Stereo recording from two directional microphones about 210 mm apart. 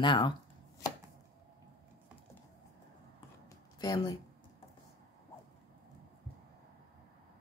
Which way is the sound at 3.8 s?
20° left (ahead or behind).